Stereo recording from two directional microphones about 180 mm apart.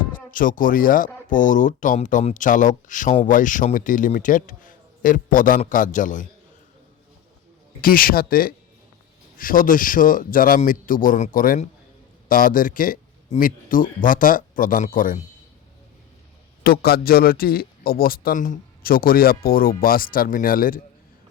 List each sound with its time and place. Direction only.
0.3 s speech: 50° left (ahead or behind)
7.8 s speech: 55° left (ahead or behind)
16.6 s a man's voice: 60° left (ahead or behind)